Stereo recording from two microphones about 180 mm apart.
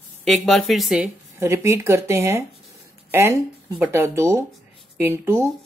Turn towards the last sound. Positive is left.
turn(degrees=-15)  # may be behind; listen again after turning